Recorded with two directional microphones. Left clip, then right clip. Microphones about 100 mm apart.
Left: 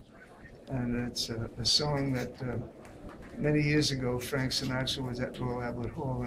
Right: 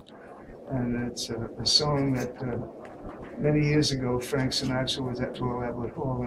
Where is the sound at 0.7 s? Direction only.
25° left (ahead or behind).